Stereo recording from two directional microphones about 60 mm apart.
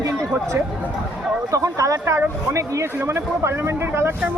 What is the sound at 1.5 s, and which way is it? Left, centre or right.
Speech, right.